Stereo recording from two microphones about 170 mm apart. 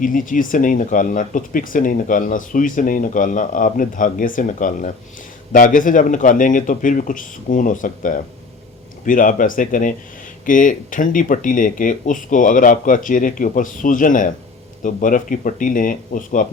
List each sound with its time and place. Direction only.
0.0 s speech: 50° left (ahead or behind)